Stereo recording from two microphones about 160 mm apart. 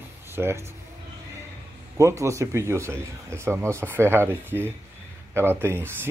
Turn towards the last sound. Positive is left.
turn(degrees=-15)  # may be behind; listen again after turning